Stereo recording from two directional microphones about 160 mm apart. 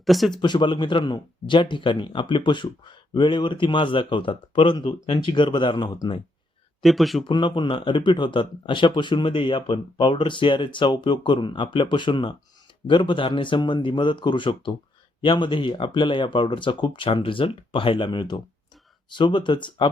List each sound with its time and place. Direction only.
0.0 s speech: centre (ahead or behind)
0.4 s speech: 30° left (ahead or behind)
6.8 s speech: centre (ahead or behind)
7.3 s speech: 30° left (ahead or behind)